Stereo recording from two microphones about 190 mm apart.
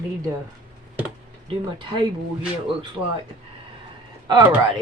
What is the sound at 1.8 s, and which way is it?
Speech, 25° right (ahead or behind).